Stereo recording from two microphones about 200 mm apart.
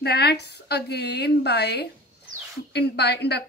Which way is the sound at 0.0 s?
55° left (ahead or behind).